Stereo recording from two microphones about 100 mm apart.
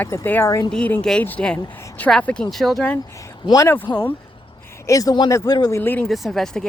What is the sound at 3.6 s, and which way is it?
Speech, 20° left (ahead or behind).